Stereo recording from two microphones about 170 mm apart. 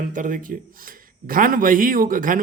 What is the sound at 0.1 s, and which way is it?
Speech, 50° right (ahead or behind).